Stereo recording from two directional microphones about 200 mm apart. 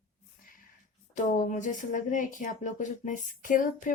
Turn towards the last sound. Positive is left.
turn(degrees=40)  # may be behind; listen again after turning